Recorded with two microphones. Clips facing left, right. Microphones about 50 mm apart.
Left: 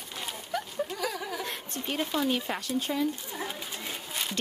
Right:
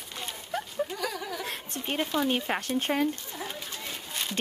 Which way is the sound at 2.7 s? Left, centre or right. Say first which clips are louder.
Right 2 dB; right.